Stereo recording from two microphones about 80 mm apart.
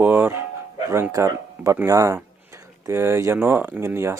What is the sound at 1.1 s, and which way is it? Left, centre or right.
Speech, right.